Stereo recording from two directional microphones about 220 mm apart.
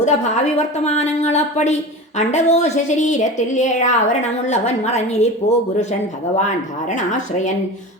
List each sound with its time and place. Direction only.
0.0 s a woman's voice: 30° left (ahead or behind)